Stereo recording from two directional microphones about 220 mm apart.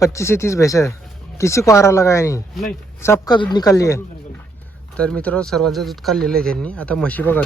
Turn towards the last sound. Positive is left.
turn(degrees=10)  # may be behind; listen again after turning